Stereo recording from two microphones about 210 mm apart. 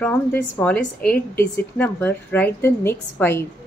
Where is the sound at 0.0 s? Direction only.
10° left (ahead or behind).